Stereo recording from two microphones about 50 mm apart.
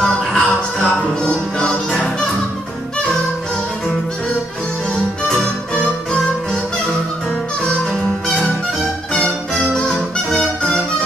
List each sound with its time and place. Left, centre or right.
0.0 s music: centre
4.9 s music: centre
9.5 s music: centre